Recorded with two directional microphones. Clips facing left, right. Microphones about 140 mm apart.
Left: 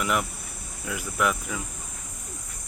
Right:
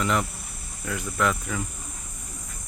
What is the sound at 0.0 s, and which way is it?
Speech, 10° left (ahead or behind).